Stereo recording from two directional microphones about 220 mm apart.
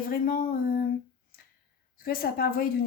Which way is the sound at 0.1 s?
40° left (ahead or behind).